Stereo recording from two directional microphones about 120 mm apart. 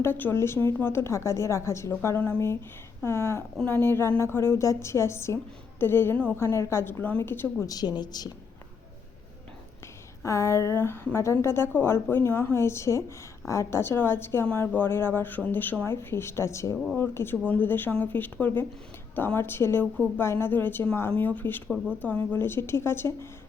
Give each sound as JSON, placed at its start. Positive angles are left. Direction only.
{"t": 0.0, "sound": "a woman's voice", "side_deg": 15}
{"t": 7.7, "sound": "a woman's voice", "side_deg": 35}
{"t": 10.2, "sound": "a woman's voice", "side_deg": 25}
{"t": 16.7, "sound": "speech", "side_deg": 0}
{"t": 17.0, "sound": "a woman's voice", "side_deg": 20}